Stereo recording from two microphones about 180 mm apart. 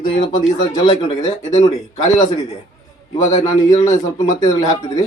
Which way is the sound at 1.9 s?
40° left (ahead or behind).